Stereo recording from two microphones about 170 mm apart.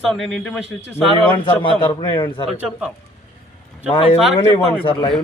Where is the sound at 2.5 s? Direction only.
5° right (ahead or behind).